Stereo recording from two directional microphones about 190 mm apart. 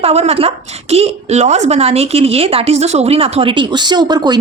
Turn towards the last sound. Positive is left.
turn(degrees=-20)  # may be behind; listen again after turning